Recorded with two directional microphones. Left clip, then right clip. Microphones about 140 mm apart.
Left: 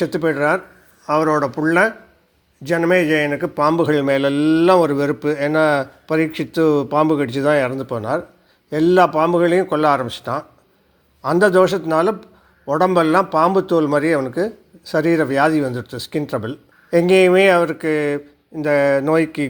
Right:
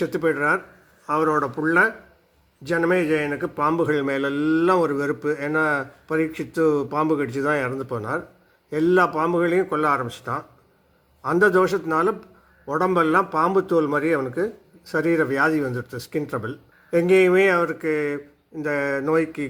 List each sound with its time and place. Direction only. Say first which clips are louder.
0.0 s a man's voice: left 4 dB; 25° left (ahead or behind)